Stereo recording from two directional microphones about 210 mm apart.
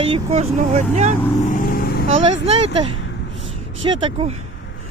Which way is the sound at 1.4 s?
35° left (ahead or behind).